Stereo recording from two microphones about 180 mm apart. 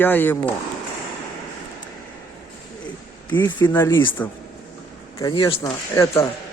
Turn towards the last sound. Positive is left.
turn(degrees=20)  # may be behind; listen again after turning